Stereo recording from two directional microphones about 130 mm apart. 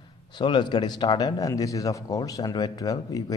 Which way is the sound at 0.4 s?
35° left (ahead or behind).